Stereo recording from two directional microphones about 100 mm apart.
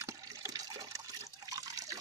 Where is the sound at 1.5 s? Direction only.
35° right (ahead or behind).